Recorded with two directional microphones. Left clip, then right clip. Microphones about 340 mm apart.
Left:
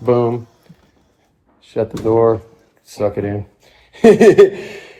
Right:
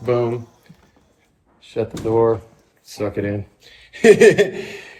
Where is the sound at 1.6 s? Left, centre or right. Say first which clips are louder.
Left 5 dB; centre.